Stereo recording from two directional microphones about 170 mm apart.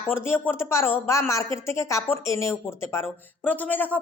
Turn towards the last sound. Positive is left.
turn(degrees=10)  # may be behind; listen again after turning